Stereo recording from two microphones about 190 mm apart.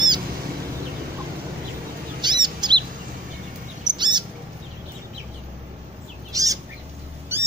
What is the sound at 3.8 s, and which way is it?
Chirp, 25° right (ahead or behind).